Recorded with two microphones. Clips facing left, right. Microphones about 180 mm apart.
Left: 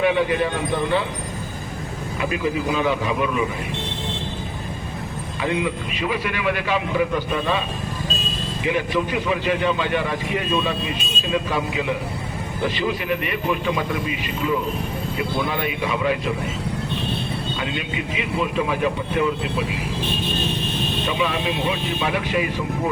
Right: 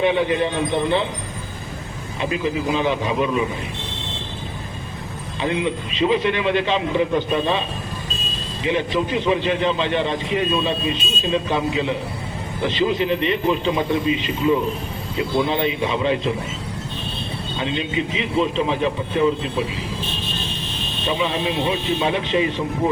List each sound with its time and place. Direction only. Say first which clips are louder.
0.0 s a man's voice: right 1 dB; 25° right (ahead or behind)
2.3 s a man's voice: right 2 dB; 25° right (ahead or behind)
5.4 s a man's voice: right 1 dB; 25° right (ahead or behind)
8.6 s a man's voice: right 1 dB; 25° right (ahead or behind)
17.6 s a man's voice: right 4 dB; 25° right (ahead or behind)
21.1 s a man's voice: right 3 dB; 25° right (ahead or behind)